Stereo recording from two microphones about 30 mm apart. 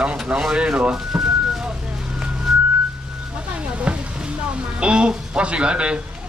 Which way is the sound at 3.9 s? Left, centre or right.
Right.